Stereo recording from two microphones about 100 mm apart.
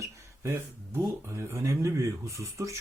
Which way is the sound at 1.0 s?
30° right (ahead or behind).